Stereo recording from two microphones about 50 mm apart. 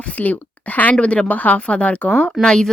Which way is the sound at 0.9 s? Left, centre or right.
Left.